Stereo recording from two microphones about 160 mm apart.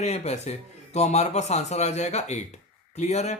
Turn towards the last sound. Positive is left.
turn(degrees=45)  # may be behind; listen again after turning